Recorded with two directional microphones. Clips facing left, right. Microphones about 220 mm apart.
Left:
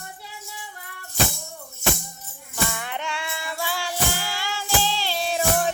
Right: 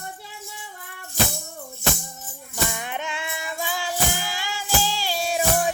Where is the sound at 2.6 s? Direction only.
15° right (ahead or behind).